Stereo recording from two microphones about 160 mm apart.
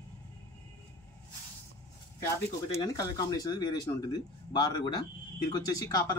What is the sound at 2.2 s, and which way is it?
A man's voice, 25° left (ahead or behind).